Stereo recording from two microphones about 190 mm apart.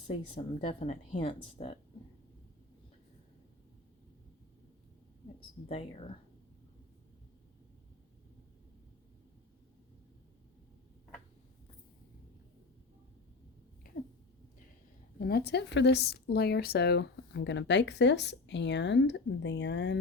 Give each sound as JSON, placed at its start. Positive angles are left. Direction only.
{"t": 0.1, "sound": "speech", "side_deg": 30}
{"t": 5.4, "sound": "speech", "side_deg": 30}
{"t": 15.2, "sound": "speech", "side_deg": 55}